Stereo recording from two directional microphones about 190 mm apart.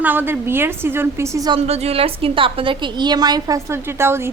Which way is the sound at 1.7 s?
35° right (ahead or behind).